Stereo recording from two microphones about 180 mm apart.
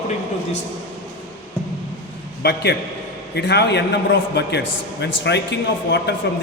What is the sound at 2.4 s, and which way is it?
A man's voice, 65° left (ahead or behind).